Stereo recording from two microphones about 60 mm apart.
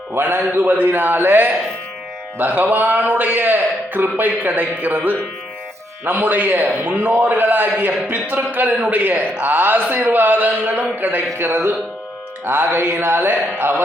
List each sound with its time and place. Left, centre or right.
0.1 s a man's voice: right